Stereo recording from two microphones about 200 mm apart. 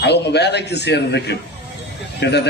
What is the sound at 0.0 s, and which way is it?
A man's voice, 55° left (ahead or behind).